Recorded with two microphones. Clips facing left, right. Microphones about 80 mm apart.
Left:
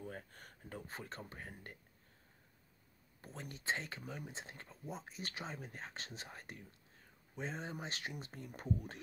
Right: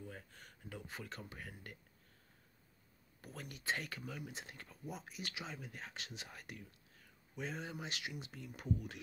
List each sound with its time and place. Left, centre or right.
0.0 s speech: left
3.2 s speech: left